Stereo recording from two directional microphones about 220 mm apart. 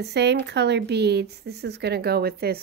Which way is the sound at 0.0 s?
50° right (ahead or behind).